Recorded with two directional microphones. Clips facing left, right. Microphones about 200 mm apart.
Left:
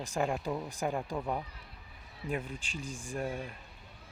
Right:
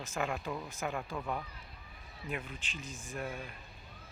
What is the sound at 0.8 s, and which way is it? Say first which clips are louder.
Speech: left 4 dB; 30° left (ahead or behind).